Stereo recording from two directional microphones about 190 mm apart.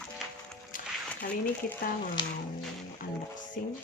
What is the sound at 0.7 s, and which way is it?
Music, 45° left (ahead or behind).